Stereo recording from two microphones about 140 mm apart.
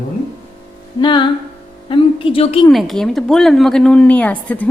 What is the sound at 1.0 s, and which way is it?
Music, 35° left (ahead or behind).